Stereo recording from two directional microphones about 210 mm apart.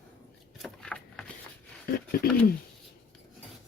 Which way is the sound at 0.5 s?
Centre (ahead or behind).